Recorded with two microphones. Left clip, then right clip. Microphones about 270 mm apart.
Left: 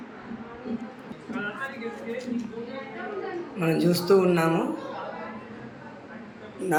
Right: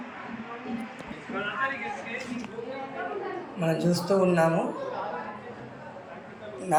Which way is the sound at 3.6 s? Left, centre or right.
Centre.